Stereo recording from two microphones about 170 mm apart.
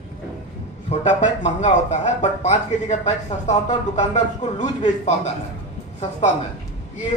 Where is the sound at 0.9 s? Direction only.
45° left (ahead or behind).